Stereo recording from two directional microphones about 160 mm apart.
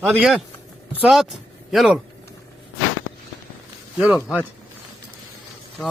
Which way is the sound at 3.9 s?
10° right (ahead or behind).